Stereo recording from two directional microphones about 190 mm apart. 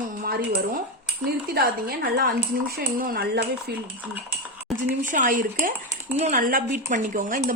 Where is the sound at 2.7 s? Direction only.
50° right (ahead or behind).